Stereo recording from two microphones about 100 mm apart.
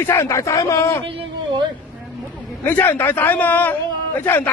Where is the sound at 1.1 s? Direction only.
60° right (ahead or behind).